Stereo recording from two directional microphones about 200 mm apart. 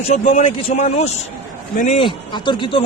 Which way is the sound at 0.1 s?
35° left (ahead or behind).